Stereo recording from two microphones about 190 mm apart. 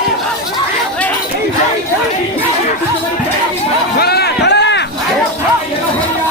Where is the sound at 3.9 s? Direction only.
55° left (ahead or behind).